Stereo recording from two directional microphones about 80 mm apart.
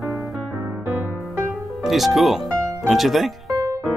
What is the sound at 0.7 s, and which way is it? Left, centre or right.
Music, right.